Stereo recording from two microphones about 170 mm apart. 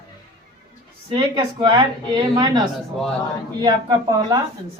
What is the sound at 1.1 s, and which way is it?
Speech, 30° right (ahead or behind).